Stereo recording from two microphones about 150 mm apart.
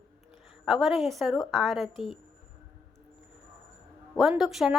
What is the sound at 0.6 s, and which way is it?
A woman's voice, centre (ahead or behind).